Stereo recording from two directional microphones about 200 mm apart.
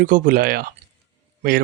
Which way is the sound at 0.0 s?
40° right (ahead or behind).